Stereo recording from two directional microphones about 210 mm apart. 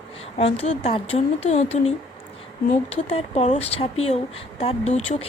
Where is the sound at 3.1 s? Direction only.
30° left (ahead or behind).